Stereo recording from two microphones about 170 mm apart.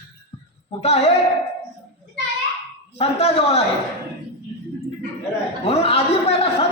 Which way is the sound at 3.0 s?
35° left (ahead or behind).